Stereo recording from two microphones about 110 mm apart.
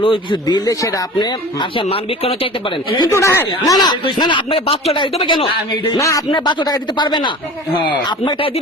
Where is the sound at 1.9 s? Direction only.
60° left (ahead or behind).